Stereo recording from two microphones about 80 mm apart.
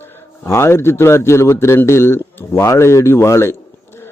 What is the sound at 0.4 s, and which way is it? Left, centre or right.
A man's voice, left.